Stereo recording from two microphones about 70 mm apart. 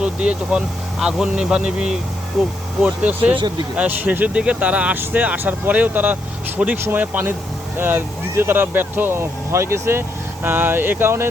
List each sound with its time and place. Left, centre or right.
0.0 s speech: centre
2.4 s speech: centre
2.8 s speech: centre
6.6 s speech: centre
6.9 s speech: right
10.4 s speech: right